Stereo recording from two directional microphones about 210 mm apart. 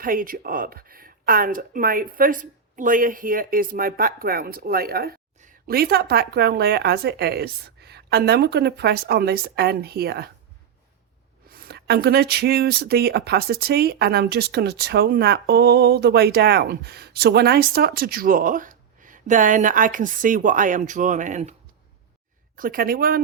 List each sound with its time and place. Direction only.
0.0 s speech: 40° right (ahead or behind)
11.4 s speech: 45° right (ahead or behind)
22.5 s speech: 40° right (ahead or behind)